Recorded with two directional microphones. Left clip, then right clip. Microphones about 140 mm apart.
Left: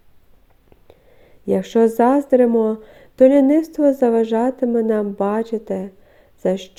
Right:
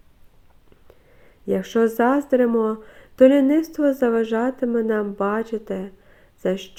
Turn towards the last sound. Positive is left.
turn(degrees=25)  # may be behind; listen again after turning